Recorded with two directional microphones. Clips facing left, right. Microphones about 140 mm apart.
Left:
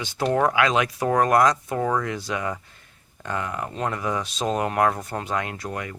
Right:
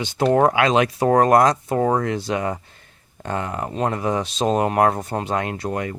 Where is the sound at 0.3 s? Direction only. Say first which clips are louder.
Right 4 dB; 35° right (ahead or behind).